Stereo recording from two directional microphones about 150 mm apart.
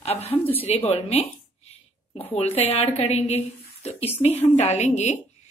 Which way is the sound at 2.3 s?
45° left (ahead or behind).